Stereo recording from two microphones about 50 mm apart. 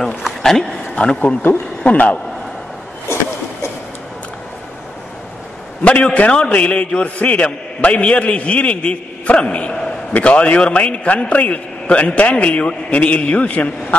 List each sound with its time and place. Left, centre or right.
0.4 s speech: centre
1.0 s a man's voice: left
1.3 s speech: left
1.9 s a man's voice: left
5.9 s a man's voice: left